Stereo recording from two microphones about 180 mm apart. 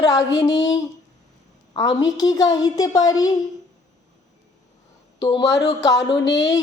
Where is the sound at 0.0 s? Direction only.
20° left (ahead or behind).